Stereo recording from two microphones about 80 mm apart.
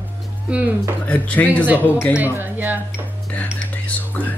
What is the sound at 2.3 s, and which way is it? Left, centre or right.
Speech, right.